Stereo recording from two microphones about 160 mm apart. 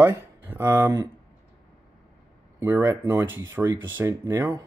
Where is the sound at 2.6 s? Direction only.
15° right (ahead or behind).